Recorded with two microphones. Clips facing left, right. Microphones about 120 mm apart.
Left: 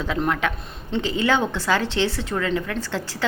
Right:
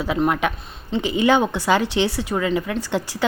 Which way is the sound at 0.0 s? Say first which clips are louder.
Right 3 dB; 10° right (ahead or behind).